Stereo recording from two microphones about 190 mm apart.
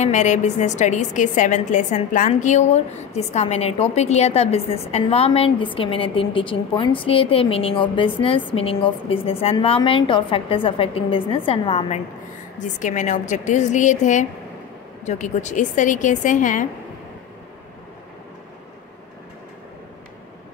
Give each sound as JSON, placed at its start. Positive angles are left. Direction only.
{"t": 0.0, "sound": "a woman's voice", "side_deg": 40}